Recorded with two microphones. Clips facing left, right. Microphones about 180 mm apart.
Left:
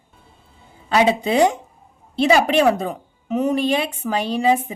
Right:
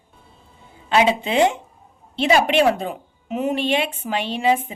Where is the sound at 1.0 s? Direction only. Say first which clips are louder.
Left 1 dB; 35° left (ahead or behind).